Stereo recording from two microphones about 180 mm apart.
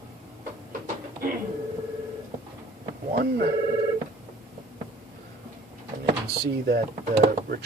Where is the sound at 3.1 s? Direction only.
60° right (ahead or behind).